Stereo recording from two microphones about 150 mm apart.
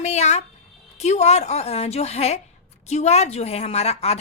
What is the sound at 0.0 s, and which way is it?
A woman's voice, 50° left (ahead or behind).